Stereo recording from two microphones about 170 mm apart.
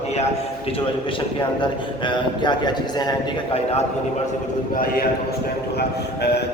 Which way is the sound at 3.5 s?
35° left (ahead or behind).